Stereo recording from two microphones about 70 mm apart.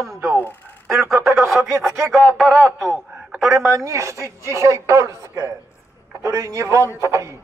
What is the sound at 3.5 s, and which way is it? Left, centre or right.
Speech, right.